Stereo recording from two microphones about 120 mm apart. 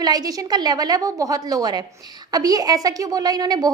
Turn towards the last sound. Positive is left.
turn(degrees=-30)  # may be behind; listen again after turning